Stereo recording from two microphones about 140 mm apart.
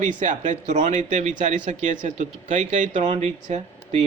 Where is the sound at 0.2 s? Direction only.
65° right (ahead or behind).